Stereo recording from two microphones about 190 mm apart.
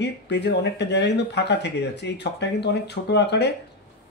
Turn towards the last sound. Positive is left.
turn(degrees=65)  # may be behind; listen again after turning